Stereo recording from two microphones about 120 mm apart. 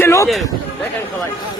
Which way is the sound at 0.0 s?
25° left (ahead or behind).